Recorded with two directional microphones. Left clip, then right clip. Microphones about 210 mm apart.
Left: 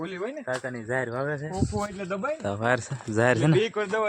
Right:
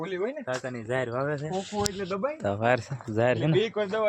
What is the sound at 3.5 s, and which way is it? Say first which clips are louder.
Speech: left 1 dB; 50° left (ahead or behind).